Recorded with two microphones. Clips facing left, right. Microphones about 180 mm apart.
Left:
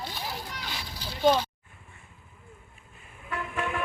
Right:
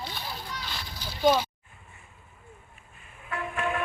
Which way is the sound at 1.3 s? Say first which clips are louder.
Right 1 dB; 10° right (ahead or behind).